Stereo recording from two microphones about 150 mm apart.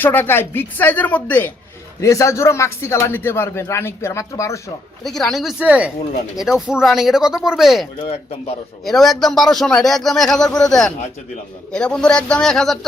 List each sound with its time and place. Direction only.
0.0 s a man's voice: 15° left (ahead or behind)
5.0 s a man's voice: centre (ahead or behind)
8.0 s speech: 40° left (ahead or behind)
8.8 s a man's voice: centre (ahead or behind)